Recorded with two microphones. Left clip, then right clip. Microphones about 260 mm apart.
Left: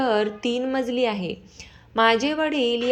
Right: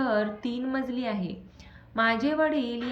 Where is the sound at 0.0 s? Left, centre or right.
Centre.